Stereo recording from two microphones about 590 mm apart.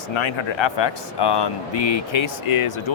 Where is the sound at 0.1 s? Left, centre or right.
Left.